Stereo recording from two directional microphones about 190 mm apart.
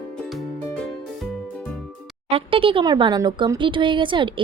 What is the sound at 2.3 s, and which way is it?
Speech, 30° right (ahead or behind).